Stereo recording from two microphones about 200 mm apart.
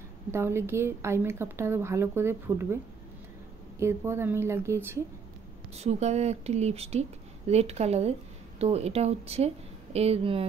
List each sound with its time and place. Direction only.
0.3 s a woman's voice: 10° right (ahead or behind)
3.8 s a woman's voice: 10° right (ahead or behind)
5.8 s speech: 35° right (ahead or behind)